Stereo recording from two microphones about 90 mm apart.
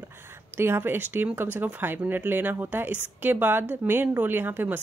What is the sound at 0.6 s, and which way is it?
Speech, 25° right (ahead or behind).